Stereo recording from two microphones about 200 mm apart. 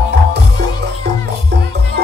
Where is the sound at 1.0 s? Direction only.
55° right (ahead or behind).